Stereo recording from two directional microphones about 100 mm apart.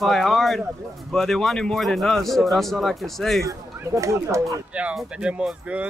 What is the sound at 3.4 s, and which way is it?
Speech, 30° right (ahead or behind).